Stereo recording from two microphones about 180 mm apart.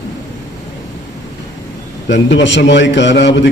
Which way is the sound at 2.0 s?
80° left.